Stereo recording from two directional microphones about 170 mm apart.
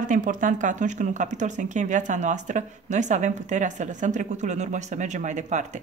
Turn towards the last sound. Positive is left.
turn(degrees=-45)  # may be behind; listen again after turning